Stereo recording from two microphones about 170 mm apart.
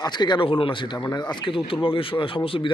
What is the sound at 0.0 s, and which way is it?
A man's voice, 25° left (ahead or behind).